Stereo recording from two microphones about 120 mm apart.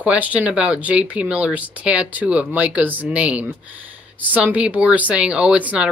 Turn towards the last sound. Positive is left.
turn(degrees=-10)  # may be behind; listen again after turning